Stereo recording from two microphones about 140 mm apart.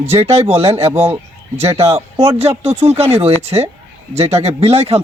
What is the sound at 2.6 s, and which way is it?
Speech, 45° right (ahead or behind).